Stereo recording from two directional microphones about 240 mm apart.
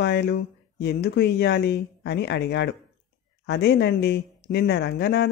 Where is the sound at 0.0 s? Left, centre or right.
Left.